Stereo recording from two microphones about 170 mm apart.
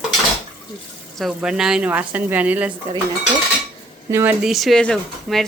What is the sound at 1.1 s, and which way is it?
Speech, centre (ahead or behind).